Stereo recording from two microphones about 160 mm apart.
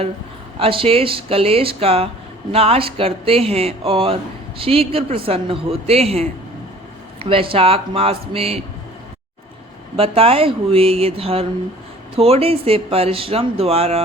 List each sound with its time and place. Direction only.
0.6 s speech: 35° right (ahead or behind)
7.3 s speech: 35° right (ahead or behind)
10.0 s speech: 35° right (ahead or behind)